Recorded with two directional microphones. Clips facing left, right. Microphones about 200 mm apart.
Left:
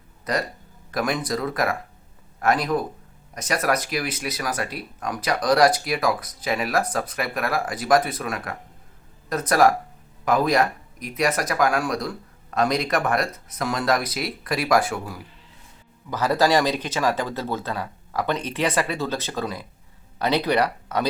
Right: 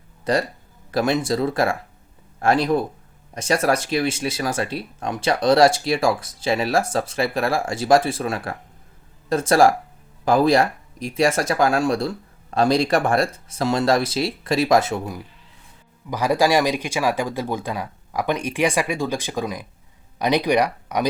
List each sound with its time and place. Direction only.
0.3 s speech: 30° right (ahead or behind)
16.0 s speech: 15° right (ahead or behind)